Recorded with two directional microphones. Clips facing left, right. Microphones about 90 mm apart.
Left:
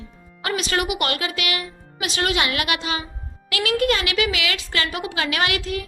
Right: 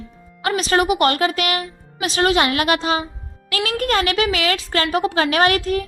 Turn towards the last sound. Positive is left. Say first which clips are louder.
# right 7 dB
turn(degrees=-40)  # may be behind; listen again after turning